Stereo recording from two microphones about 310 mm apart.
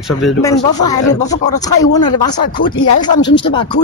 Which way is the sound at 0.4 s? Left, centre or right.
Centre.